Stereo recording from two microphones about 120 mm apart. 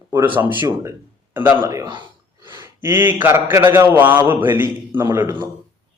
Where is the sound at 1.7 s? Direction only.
25° right (ahead or behind).